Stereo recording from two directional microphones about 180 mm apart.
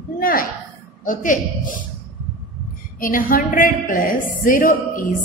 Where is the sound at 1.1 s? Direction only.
45° left (ahead or behind).